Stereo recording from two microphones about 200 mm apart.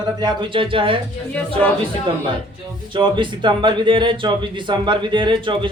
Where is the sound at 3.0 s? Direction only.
25° right (ahead or behind).